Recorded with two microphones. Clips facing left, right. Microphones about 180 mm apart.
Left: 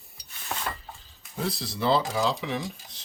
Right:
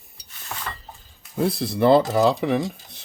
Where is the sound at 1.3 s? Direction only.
55° right (ahead or behind).